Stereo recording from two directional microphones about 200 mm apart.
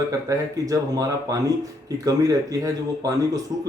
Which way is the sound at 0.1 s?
15° right (ahead or behind).